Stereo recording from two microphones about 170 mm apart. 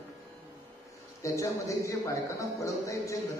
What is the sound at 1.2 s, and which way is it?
A man's voice, 20° left (ahead or behind).